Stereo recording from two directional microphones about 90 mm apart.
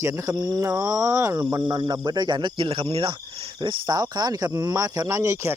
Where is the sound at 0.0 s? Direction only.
35° right (ahead or behind).